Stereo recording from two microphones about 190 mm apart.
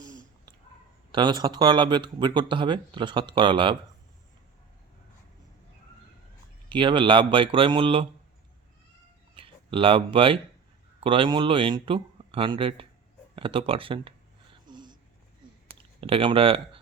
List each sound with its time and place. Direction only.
1.1 s speech: 25° right (ahead or behind)
6.7 s speech: 25° right (ahead or behind)
9.3 s speech: 25° right (ahead or behind)
14.7 s a sound: 20° right (ahead or behind)
16.0 s speech: 30° right (ahead or behind)